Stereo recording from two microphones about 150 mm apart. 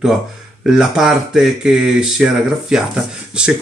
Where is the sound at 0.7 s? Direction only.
5° right (ahead or behind).